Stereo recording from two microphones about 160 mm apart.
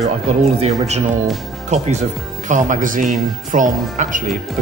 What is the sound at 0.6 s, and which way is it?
Speech, 45° right (ahead or behind).